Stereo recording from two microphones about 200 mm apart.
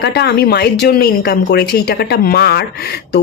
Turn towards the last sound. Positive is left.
turn(degrees=55)  # may be behind; listen again after turning